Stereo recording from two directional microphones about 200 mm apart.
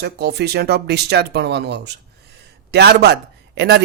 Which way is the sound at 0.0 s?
55° right (ahead or behind).